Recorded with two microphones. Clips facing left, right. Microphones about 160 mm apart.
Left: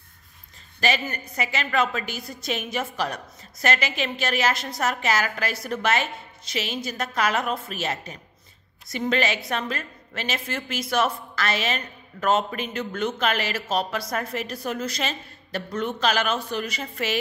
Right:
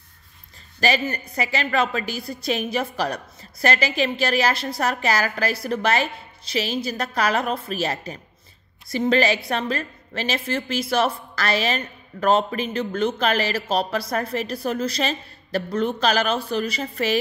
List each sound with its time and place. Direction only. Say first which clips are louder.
0.7 s a woman's voice: right 3 dB; 35° right (ahead or behind)